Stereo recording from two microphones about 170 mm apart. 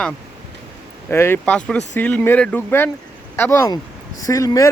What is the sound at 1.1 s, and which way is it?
Speech, 15° left (ahead or behind).